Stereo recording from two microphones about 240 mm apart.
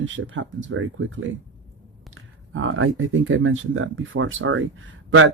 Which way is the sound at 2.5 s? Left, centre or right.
Right.